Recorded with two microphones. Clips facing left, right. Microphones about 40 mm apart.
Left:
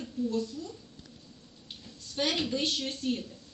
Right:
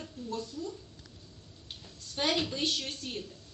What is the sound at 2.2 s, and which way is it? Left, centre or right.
Speech, centre.